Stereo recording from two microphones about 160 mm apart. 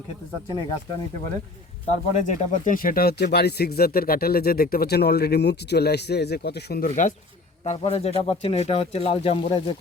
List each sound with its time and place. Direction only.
1.9 s speech: 50° left (ahead or behind)
7.6 s speech: 40° left (ahead or behind)